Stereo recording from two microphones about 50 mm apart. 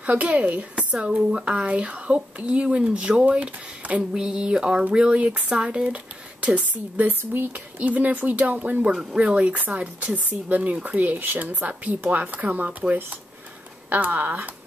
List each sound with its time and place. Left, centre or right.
0.0 s speech: right
4.2 s a sound: centre
4.9 s speech: right